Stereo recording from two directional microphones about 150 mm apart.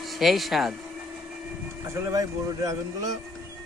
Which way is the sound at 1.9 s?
20° right (ahead or behind).